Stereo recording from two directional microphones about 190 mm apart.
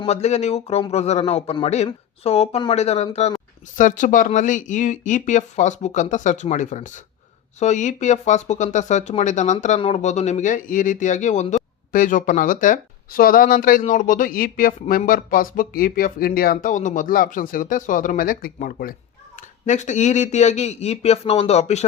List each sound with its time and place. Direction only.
0.0 s a man's voice: 35° left (ahead or behind)